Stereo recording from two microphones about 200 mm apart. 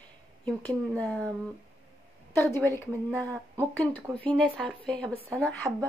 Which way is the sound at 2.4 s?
10° left (ahead or behind).